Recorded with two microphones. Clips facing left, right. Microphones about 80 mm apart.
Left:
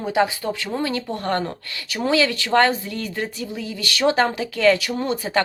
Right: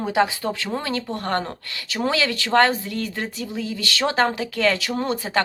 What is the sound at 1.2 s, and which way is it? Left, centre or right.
A woman's voice, right.